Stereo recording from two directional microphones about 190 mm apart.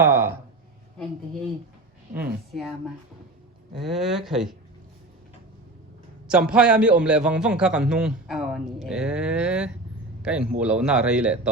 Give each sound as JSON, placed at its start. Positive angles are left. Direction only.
{"t": 0.0, "sound": "a sound", "side_deg": -10}
{"t": 2.5, "sound": "a man's voice", "side_deg": 0}
{"t": 6.2, "sound": "a man's voice", "side_deg": -5}